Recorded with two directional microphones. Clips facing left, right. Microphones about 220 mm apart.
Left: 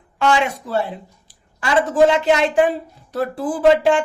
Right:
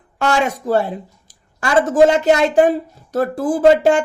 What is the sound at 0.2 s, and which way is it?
A woman's voice, 45° right (ahead or behind).